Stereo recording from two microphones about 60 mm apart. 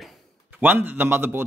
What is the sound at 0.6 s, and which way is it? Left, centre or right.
Speech, right.